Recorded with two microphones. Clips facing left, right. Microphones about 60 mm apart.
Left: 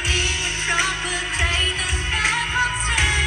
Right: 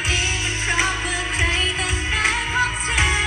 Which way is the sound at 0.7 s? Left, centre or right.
Right.